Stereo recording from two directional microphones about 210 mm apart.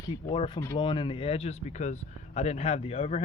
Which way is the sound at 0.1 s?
20° left (ahead or behind).